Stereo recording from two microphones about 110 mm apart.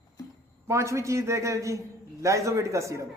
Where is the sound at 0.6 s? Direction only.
25° right (ahead or behind).